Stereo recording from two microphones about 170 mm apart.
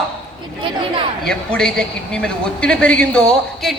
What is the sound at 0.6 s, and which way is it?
Speech, 30° right (ahead or behind).